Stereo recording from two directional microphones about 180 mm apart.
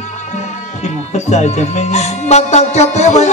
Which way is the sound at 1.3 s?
40° left (ahead or behind).